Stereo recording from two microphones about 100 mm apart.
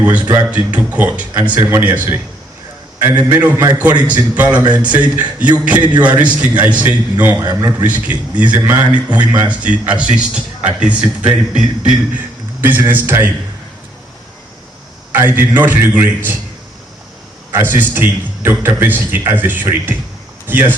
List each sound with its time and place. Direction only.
0.0 s a man's voice: 15° right (ahead or behind)
15.1 s a man's voice: 20° right (ahead or behind)
17.5 s a man's voice: 20° right (ahead or behind)